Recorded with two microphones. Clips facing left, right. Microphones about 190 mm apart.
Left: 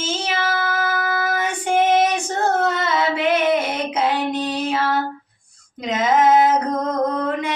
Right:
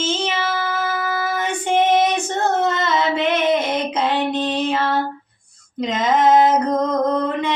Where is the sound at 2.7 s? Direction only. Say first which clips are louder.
Right 1 dB; 10° left (ahead or behind).